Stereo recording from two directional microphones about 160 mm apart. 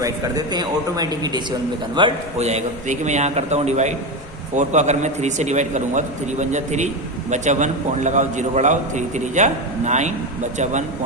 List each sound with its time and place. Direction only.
0.0 s a man's voice: 25° right (ahead or behind)
2.4 s a man's voice: 45° right (ahead or behind)